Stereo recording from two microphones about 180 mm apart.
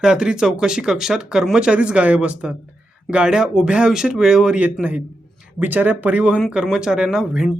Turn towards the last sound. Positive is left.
turn(degrees=-5)  # may be behind; listen again after turning